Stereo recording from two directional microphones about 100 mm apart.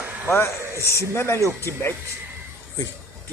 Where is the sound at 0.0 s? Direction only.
15° right (ahead or behind).